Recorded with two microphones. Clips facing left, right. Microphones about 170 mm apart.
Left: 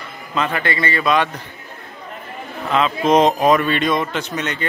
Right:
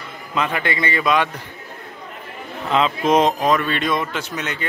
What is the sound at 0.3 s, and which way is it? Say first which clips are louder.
A man's voice: left 1 dB; 10° right (ahead or behind).